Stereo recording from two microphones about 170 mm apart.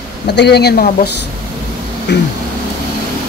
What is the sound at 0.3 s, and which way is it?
Speech, 80° left.